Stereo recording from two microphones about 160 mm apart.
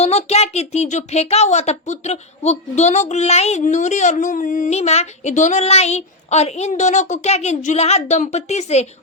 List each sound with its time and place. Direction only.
0.0 s speech: 40° left (ahead or behind)